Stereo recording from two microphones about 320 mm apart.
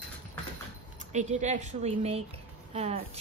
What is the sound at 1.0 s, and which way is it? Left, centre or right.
A woman's voice, right.